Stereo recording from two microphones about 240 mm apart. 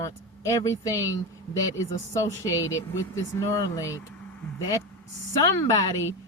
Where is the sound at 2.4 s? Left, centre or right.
Centre.